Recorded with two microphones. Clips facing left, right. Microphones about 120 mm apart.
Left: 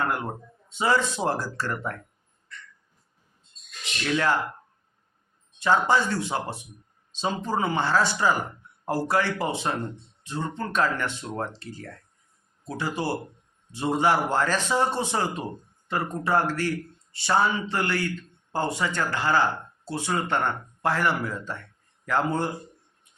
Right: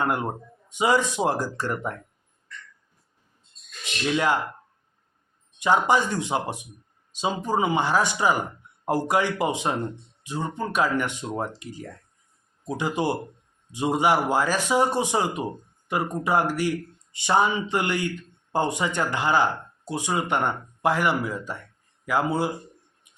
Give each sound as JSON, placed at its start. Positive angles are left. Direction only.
{"t": 0.0, "sound": "speech", "side_deg": -20}
{"t": 4.0, "sound": "speech", "side_deg": -15}
{"t": 5.5, "sound": "speech", "side_deg": -15}